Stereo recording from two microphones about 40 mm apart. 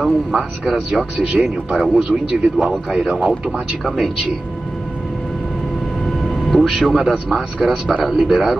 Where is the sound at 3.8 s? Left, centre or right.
Centre.